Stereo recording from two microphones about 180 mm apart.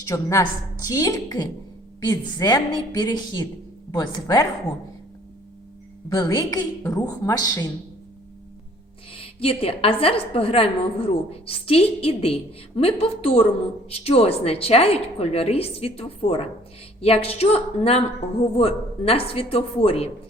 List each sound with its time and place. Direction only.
0.1 s a woman's voice: 15° left (ahead or behind)
6.1 s a woman's voice: 20° left (ahead or behind)
9.1 s a woman's voice: 30° left (ahead or behind)